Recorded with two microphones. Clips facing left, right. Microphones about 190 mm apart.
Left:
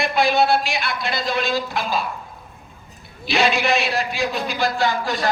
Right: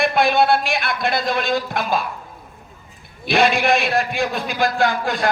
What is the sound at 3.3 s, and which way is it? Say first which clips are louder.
A man's voice: right 3 dB; 55° right (ahead or behind).